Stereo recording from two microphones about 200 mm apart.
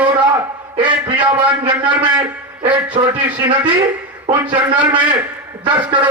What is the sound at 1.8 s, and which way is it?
Speech, 10° right (ahead or behind).